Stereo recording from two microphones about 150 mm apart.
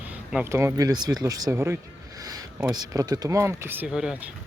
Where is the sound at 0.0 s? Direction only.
10° right (ahead or behind).